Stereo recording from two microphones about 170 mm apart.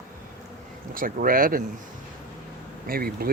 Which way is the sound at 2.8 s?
60° right (ahead or behind).